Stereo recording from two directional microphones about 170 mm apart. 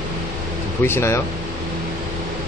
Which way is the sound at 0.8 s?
15° left (ahead or behind).